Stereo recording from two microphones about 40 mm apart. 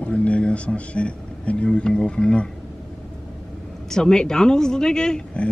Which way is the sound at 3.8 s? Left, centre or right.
Centre.